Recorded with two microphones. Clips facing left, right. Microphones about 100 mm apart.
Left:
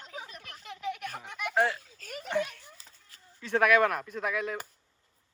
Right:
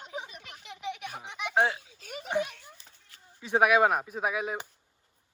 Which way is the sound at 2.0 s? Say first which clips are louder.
Right 1 dB; 10° right (ahead or behind).